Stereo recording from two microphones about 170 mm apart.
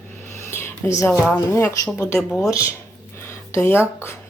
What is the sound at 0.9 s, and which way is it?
Speech, 15° left (ahead or behind).